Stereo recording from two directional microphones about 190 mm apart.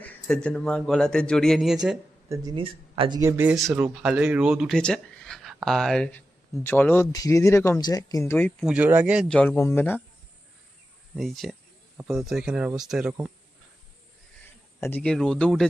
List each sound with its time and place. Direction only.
0.0 s speech: 5° left (ahead or behind)
2.3 s speech: 20° right (ahead or behind)
3.2 s speech: 15° right (ahead or behind); by 8.5 s 10° left (ahead or behind)
8.6 s speech: 5° right (ahead or behind)
9.3 s speech: 10° left (ahead or behind)
11.2 s speech: centre (ahead or behind)
14.8 s speech: 10° left (ahead or behind)